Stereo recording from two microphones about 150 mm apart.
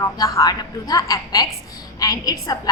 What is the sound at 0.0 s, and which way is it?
A woman's voice, 25° left (ahead or behind).